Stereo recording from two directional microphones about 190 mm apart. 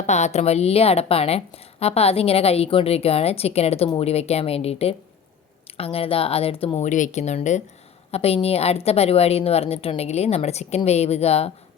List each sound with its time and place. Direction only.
0.0 s a woman's voice: 35° left (ahead or behind)